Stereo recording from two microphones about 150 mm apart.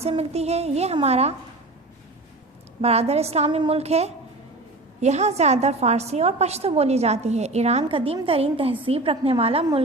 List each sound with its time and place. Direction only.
0.0 s a woman's voice: 40° right (ahead or behind)
2.8 s a woman's voice: 45° right (ahead or behind)